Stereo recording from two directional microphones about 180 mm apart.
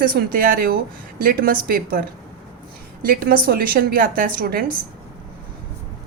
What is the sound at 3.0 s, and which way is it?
A woman's voice, 55° right (ahead or behind).